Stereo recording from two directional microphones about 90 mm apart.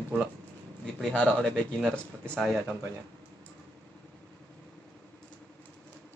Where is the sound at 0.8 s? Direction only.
10° left (ahead or behind).